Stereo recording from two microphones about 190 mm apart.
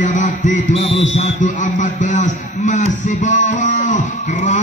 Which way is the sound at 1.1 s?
40° left (ahead or behind).